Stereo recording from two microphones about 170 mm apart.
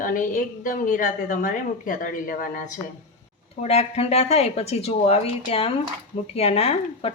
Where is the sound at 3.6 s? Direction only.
40° left (ahead or behind).